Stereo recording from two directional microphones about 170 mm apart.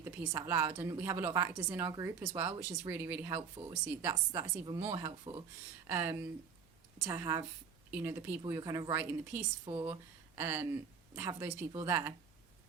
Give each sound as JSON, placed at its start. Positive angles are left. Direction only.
{"t": 0.0, "sound": "a woman's voice", "side_deg": -15}
{"t": 4.0, "sound": "a woman's voice", "side_deg": -25}
{"t": 9.6, "sound": "speech", "side_deg": -30}
{"t": 10.3, "sound": "a woman's voice", "side_deg": -10}